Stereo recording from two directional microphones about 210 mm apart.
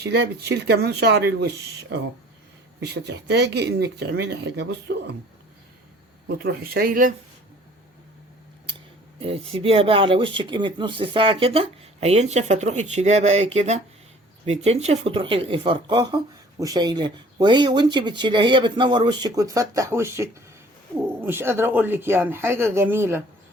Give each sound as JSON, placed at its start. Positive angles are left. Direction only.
{"t": 0.0, "sound": "speech", "side_deg": -50}
{"t": 2.8, "sound": "speech", "side_deg": -50}
{"t": 6.2, "sound": "speech", "side_deg": -45}
{"t": 9.2, "sound": "speech", "side_deg": -25}